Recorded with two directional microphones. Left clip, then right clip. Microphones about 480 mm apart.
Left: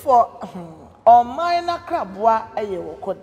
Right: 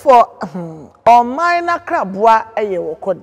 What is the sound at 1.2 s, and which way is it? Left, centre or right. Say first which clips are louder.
A woman's voice: right 6 dB; right.